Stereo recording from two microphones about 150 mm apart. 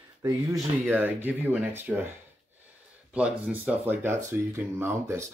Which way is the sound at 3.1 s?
10° right (ahead or behind).